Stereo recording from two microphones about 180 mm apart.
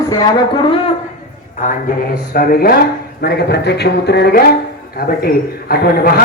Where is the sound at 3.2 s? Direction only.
65° left (ahead or behind).